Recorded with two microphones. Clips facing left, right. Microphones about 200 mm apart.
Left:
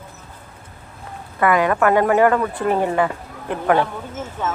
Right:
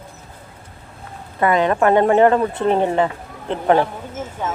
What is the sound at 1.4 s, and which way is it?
Speech, 25° right (ahead or behind).